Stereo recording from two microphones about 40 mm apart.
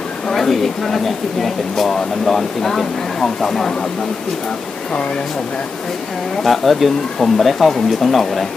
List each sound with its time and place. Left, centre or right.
0.3 s speech: centre
6.4 s speech: centre